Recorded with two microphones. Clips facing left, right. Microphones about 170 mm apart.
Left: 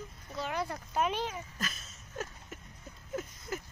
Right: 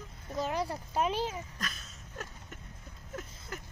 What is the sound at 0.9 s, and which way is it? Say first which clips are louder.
Speech: right 1 dB; 35° right (ahead or behind).